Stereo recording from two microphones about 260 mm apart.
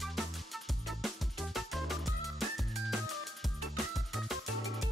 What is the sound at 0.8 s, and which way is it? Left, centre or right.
Music, centre.